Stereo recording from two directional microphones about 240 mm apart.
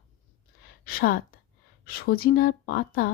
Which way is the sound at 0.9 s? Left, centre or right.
Left.